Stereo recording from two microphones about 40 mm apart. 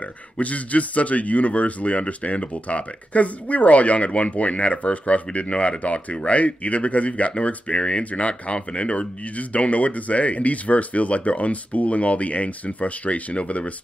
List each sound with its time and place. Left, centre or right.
0.4 s a man's voice: left